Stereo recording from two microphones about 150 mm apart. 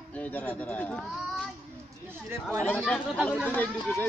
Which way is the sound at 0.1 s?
10° left (ahead or behind).